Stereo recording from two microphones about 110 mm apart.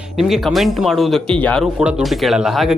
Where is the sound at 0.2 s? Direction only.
5° right (ahead or behind).